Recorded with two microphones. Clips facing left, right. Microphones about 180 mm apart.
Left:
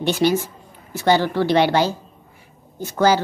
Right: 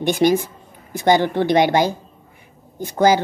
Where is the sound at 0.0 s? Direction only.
15° right (ahead or behind).